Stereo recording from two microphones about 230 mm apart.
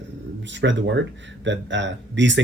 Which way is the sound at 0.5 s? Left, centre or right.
Right.